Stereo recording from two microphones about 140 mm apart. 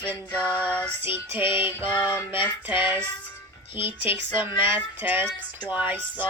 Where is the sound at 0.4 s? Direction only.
10° left (ahead or behind).